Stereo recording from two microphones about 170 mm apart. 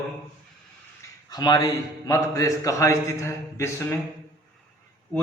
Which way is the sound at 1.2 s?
25° left (ahead or behind).